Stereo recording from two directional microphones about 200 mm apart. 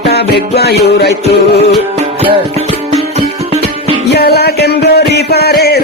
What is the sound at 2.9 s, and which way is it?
Music, 30° right (ahead or behind).